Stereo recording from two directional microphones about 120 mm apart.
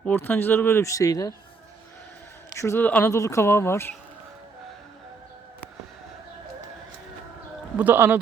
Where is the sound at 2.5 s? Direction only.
25° left (ahead or behind).